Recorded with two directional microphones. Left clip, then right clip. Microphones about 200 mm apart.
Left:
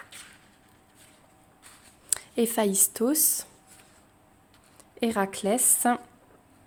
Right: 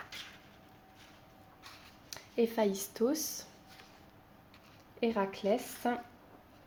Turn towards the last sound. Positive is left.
turn(degrees=55)  # may be behind; listen again after turning